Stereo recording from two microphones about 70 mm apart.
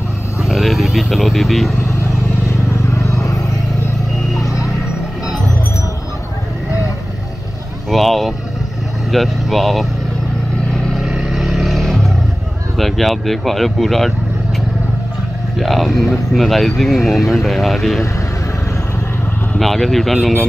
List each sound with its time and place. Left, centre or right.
0.4 s speech: centre
2.9 s vehicle: left
7.9 s vehicle: centre
9.1 s speech: centre
11.0 s vehicle: centre
12.7 s speech: centre
15.5 s speech: centre
19.6 s speech: centre